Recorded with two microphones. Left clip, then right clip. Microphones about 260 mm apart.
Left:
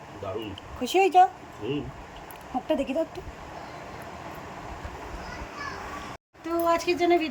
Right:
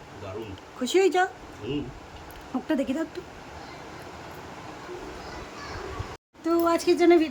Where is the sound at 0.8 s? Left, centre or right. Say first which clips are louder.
Left 3 dB; centre.